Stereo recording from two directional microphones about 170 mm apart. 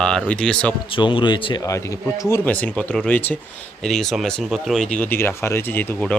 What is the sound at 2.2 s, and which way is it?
Speech, 10° left (ahead or behind).